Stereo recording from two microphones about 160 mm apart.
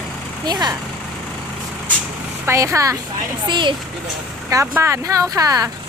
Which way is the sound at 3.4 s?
30° right (ahead or behind).